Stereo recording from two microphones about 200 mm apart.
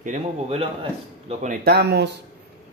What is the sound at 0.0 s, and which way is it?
Speech, 35° right (ahead or behind).